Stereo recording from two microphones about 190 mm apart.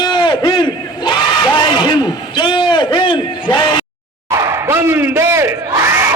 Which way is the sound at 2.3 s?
25° left (ahead or behind).